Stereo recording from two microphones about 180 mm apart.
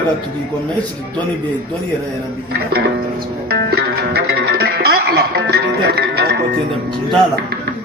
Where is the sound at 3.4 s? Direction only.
60° right (ahead or behind).